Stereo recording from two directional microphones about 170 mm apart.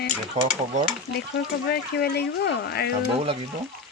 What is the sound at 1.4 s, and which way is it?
Speech, 70° left (ahead or behind).